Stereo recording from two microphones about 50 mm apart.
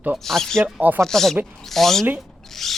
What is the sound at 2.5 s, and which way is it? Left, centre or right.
Rub, centre.